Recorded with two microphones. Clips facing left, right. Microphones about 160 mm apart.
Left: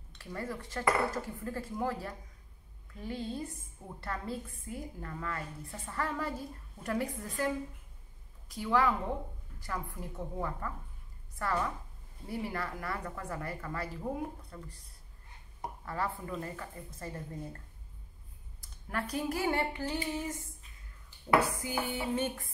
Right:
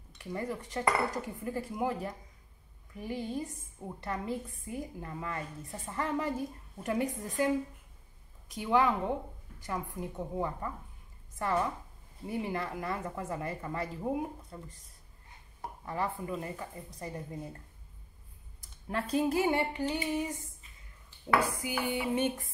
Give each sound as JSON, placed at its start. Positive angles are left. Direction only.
{"t": 0.2, "sound": "a woman's voice", "side_deg": -15}
{"t": 15.8, "sound": "speech", "side_deg": -20}
{"t": 18.6, "sound": "a woman's voice", "side_deg": -25}
{"t": 21.4, "sound": "speech", "side_deg": -15}